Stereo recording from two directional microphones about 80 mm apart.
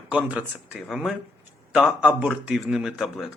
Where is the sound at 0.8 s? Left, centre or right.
Centre.